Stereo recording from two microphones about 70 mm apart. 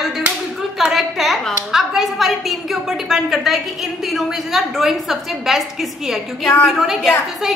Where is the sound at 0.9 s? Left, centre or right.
Centre.